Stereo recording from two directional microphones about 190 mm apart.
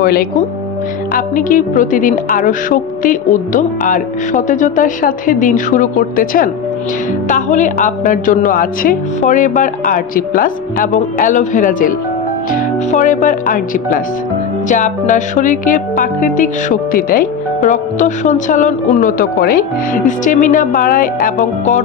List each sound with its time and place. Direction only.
0.0 s music: 55° left (ahead or behind)